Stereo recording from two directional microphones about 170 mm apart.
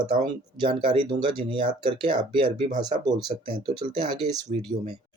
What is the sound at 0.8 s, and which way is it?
Speech, 30° right (ahead or behind).